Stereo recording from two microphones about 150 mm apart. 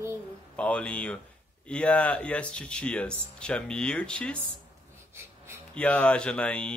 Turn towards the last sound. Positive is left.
turn(degrees=10)  # may be behind; listen again after turning